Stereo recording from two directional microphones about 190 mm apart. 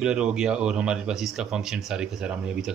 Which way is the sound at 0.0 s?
5° right (ahead or behind).